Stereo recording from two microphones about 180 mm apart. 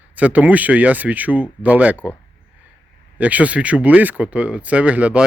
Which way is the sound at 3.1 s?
10° right (ahead or behind).